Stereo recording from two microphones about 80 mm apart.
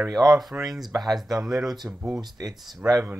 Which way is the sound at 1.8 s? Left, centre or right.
Centre.